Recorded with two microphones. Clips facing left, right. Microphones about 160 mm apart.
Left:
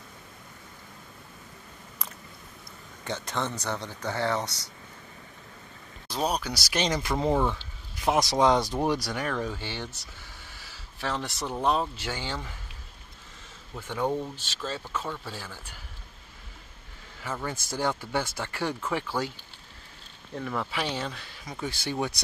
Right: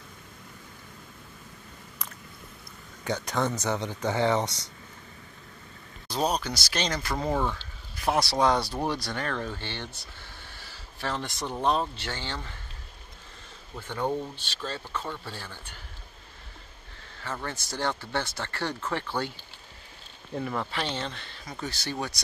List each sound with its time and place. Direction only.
3.0 s a man's voice: 10° right (ahead or behind)
6.0 s speech: 5° left (ahead or behind)
13.7 s speech: 5° left (ahead or behind)
17.2 s speech: 10° left (ahead or behind)
20.3 s speech: centre (ahead or behind)